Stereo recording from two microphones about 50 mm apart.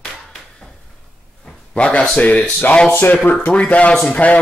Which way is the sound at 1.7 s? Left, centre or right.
Left.